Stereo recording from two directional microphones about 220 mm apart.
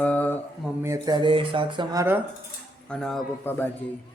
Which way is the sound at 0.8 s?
15° right (ahead or behind).